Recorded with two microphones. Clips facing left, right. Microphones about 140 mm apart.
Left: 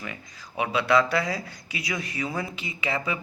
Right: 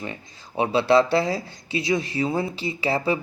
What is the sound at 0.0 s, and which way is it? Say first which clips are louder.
Speech: right 4 dB; 30° right (ahead or behind).